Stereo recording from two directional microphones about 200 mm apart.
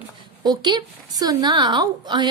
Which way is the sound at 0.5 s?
20° right (ahead or behind).